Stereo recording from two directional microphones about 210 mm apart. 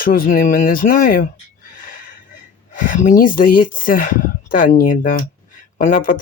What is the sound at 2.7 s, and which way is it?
Speech, 40° left (ahead or behind).